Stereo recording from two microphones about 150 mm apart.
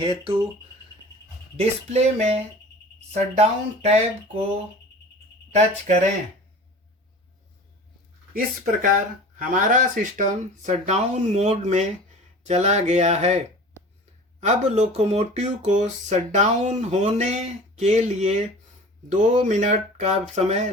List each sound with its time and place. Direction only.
0.0 s speech: 35° right (ahead or behind)
1.5 s speech: 45° right (ahead or behind)
8.3 s speech: 75° right (ahead or behind)
9.4 s speech: 60° right (ahead or behind)
14.4 s speech: 50° right (ahead or behind)